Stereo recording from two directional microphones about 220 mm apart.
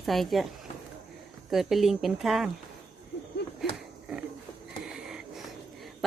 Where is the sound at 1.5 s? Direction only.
Centre (ahead or behind).